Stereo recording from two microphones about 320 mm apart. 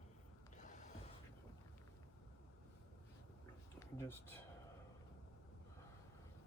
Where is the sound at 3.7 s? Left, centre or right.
Centre.